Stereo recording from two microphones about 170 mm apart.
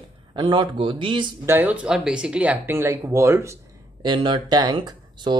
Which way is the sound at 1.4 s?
10° right (ahead or behind).